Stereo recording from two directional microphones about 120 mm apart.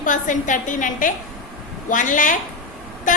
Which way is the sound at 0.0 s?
90° left.